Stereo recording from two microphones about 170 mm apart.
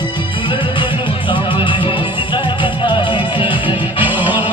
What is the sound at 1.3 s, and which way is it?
Music, 30° left (ahead or behind).